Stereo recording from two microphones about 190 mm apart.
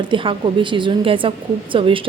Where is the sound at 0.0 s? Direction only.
25° right (ahead or behind).